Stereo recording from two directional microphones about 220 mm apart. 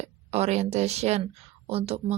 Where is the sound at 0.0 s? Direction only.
30° right (ahead or behind).